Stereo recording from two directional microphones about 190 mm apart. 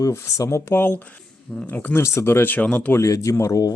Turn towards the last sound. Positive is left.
turn(degrees=15)  # may be behind; listen again after turning